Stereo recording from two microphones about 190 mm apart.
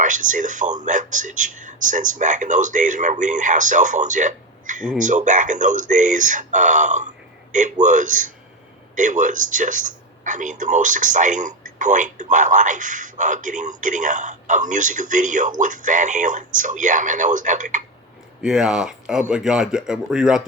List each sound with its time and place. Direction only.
0.0 s speech: 40° right (ahead or behind)
18.4 s speech: 5° right (ahead or behind)